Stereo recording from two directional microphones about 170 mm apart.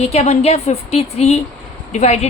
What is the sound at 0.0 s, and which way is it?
A woman's voice, 40° left (ahead or behind).